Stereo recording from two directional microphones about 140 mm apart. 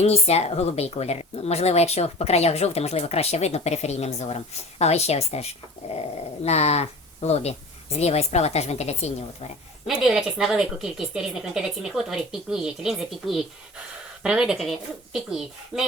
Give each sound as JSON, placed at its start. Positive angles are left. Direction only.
{"t": 0.0, "sound": "speech", "side_deg": 50}
{"t": 9.8, "sound": "a woman's voice", "side_deg": -5}